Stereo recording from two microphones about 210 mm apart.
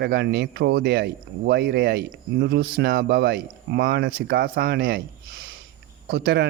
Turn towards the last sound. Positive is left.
turn(degrees=-50)  # may be behind; listen again after turning